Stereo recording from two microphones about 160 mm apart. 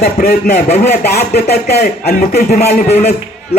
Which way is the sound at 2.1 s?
45° left (ahead or behind).